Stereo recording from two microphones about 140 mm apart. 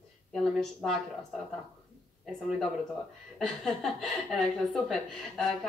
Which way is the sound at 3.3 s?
Centre (ahead or behind).